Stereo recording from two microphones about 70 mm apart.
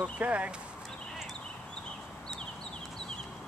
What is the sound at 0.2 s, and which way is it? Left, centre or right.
Speech, centre.